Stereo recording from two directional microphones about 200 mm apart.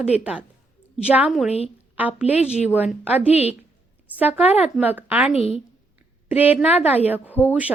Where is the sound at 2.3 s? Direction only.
35° left (ahead or behind).